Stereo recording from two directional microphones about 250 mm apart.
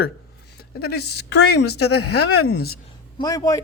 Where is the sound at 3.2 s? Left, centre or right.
Centre.